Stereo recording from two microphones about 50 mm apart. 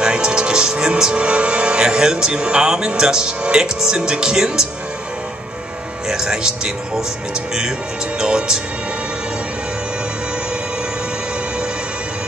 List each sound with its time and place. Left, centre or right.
0.0 s speech: centre
6.0 s speech: centre